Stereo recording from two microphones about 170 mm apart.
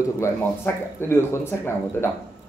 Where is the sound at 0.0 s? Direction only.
15° left (ahead or behind).